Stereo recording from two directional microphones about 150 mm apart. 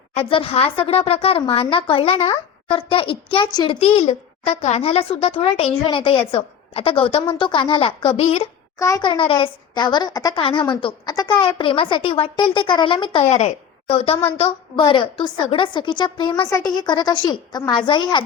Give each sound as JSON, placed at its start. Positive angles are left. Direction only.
{"t": 0.1, "sound": "a woman's voice", "side_deg": 40}
{"t": 3.8, "sound": "a woman's voice", "side_deg": 40}
{"t": 8.8, "sound": "a woman's voice", "side_deg": 25}
{"t": 13.3, "sound": "a woman's voice", "side_deg": 45}